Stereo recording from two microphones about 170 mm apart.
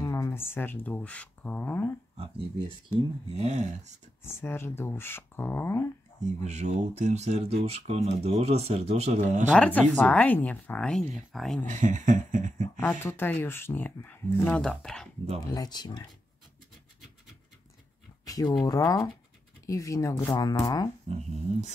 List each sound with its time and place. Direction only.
0.0 s speech: 20° left (ahead or behind)
3.3 s speech: 40° right (ahead or behind)
4.2 s speech: 15° left (ahead or behind)
6.4 s speech: 40° right (ahead or behind)
9.6 s speech: 10° left (ahead or behind)
11.6 s speech: 45° right (ahead or behind)
12.8 s speech: 10° left (ahead or behind)
15.4 s speech: 25° left (ahead or behind)
18.2 s speech: 20° left (ahead or behind)
21.1 s speech: 40° right (ahead or behind)